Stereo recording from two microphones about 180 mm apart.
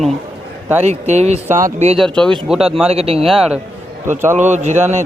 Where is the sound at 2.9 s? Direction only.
35° right (ahead or behind).